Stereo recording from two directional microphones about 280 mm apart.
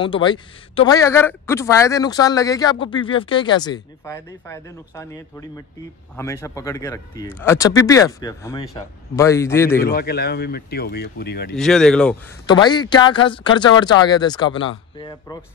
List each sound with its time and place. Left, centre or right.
0.0 s a man's voice: centre
9.8 s speech: left
11.5 s speech: centre
12.4 s a man's voice: centre